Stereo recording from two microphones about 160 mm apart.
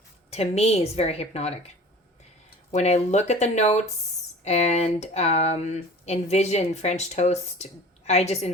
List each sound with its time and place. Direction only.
0.3 s a woman's voice: 40° left (ahead or behind)
2.7 s speech: 45° left (ahead or behind)